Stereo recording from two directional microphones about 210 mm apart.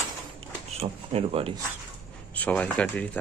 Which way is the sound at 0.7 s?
30° right (ahead or behind).